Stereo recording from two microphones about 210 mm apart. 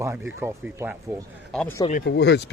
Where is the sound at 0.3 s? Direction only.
10° right (ahead or behind).